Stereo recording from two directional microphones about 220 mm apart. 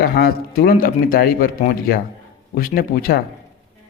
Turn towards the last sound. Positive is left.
turn(degrees=40)  # may be behind; listen again after turning